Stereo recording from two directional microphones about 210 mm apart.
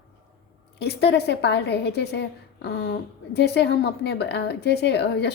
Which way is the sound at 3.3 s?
55° left (ahead or behind).